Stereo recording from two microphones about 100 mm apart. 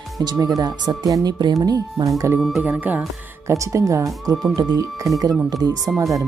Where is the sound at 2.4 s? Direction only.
Centre (ahead or behind).